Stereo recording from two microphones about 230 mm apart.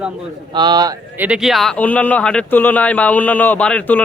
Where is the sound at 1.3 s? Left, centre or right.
Centre.